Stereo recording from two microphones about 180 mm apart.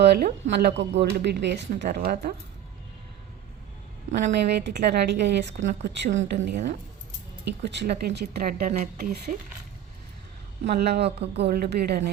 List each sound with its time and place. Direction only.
0.0 s speech: 60° right (ahead or behind)
4.4 s speech: 70° right (ahead or behind)
7.6 s speech: 70° right (ahead or behind); by 9.3 s 55° right (ahead or behind)
10.6 s speech: 65° right (ahead or behind)